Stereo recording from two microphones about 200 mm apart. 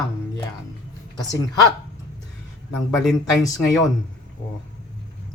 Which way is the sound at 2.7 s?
Centre (ahead or behind).